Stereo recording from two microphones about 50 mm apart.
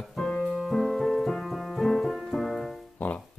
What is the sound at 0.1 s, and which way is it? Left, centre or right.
Keyboard, centre.